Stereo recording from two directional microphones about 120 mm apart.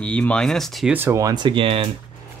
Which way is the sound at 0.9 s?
20° right (ahead or behind).